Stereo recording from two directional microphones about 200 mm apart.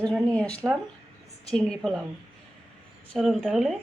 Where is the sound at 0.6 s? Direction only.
5° right (ahead or behind).